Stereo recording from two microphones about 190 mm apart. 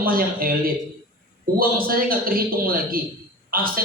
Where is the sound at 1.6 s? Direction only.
50° right (ahead or behind).